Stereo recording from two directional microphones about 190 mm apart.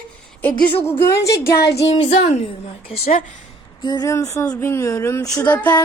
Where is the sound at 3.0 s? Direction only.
45° left (ahead or behind).